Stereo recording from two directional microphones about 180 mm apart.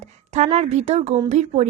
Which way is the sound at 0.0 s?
40° right (ahead or behind).